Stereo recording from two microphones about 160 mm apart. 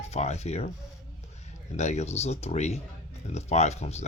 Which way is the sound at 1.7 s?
45° left (ahead or behind).